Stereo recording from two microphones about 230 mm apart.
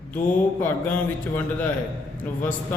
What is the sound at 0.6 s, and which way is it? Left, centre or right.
Speech, centre.